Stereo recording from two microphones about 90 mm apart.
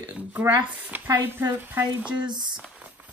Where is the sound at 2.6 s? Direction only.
15° right (ahead or behind).